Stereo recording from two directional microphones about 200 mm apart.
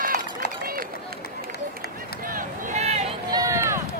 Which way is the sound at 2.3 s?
35° right (ahead or behind).